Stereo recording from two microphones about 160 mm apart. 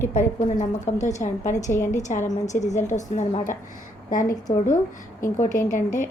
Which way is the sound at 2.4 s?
50° left (ahead or behind).